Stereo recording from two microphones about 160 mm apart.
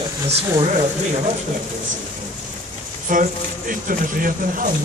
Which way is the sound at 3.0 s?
55° right (ahead or behind).